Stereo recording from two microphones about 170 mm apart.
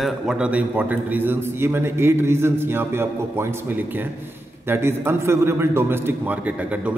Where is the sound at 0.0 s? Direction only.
5° right (ahead or behind).